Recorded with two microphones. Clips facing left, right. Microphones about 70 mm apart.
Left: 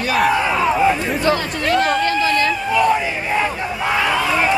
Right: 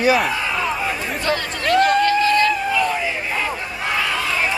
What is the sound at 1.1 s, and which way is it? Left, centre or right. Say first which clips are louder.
Speech: left 4 dB; centre.